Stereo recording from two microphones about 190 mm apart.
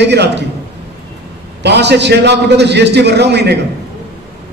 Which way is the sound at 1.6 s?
65° right (ahead or behind).